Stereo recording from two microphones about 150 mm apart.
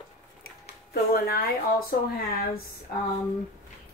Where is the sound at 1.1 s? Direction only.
80° left.